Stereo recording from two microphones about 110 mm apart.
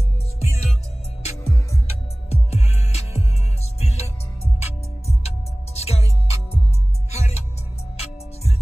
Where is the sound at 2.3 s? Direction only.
75° left (ahead or behind).